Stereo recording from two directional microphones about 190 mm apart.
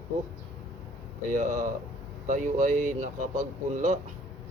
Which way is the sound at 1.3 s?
40° right (ahead or behind).